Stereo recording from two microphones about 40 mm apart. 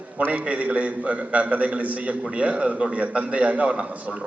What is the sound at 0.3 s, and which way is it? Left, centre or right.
A man's voice, right.